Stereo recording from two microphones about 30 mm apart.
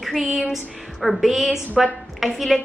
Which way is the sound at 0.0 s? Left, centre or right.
Centre.